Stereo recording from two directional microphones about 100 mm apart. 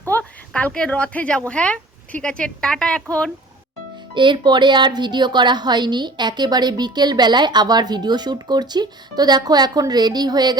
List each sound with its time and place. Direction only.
0.1 s a woman's voice: 15° left (ahead or behind)
4.1 s speech: 50° right (ahead or behind)